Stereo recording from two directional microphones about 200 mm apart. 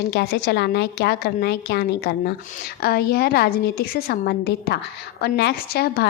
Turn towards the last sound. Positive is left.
turn(degrees=50)  # may be behind; listen again after turning